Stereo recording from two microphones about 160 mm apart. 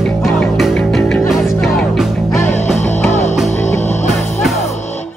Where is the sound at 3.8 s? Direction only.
45° left (ahead or behind).